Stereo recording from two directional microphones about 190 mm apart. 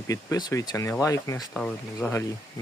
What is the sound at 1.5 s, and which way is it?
Speech, 5° left (ahead or behind).